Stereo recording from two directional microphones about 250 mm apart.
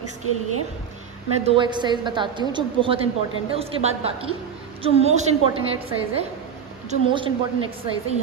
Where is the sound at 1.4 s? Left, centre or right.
Centre.